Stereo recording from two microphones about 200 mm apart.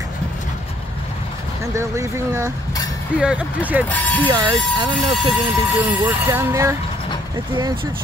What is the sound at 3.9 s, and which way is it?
Speech, 10° left (ahead or behind).